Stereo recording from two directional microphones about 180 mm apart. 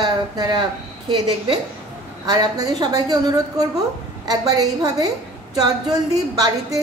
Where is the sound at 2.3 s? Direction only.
20° right (ahead or behind).